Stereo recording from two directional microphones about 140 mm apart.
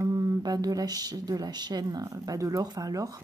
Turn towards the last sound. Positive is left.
turn(degrees=-25)  # may be behind; listen again after turning